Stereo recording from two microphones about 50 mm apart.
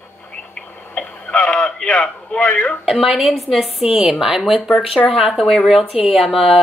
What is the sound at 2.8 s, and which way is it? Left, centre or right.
A woman's voice, centre.